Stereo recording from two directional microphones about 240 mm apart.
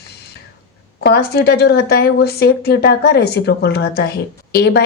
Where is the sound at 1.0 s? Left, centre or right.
Left.